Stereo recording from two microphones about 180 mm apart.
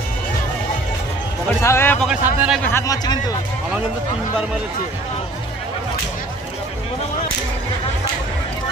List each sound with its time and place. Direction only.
1.6 s speech: 15° left (ahead or behind)
2.0 s a man's voice: 5° right (ahead or behind)
2.7 s speech: 20° left (ahead or behind)